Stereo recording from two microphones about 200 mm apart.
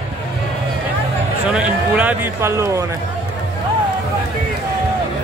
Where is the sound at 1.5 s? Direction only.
5° right (ahead or behind).